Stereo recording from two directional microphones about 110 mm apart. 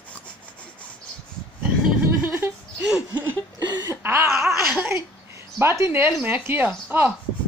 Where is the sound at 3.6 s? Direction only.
40° right (ahead or behind).